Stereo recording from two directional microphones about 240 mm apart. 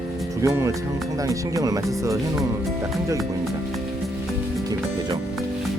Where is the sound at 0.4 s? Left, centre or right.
Centre.